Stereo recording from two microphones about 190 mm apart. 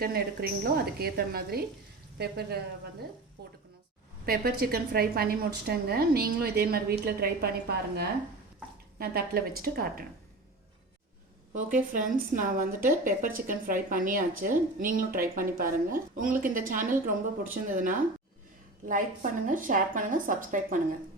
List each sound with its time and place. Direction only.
0.0 s a woman's voice: 55° right (ahead or behind)
4.3 s a woman's voice: 55° right (ahead or behind)
11.9 s a woman's voice: 45° right (ahead or behind)